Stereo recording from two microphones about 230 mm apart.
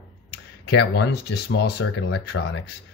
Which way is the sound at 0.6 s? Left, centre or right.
Left.